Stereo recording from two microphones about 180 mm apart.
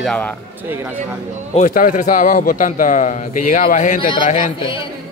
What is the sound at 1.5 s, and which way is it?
A man's voice, 45° left (ahead or behind).